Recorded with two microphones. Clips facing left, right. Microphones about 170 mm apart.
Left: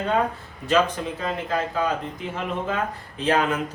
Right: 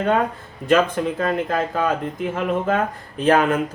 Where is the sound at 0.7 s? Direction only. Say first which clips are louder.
Right 4 dB; 55° right (ahead or behind).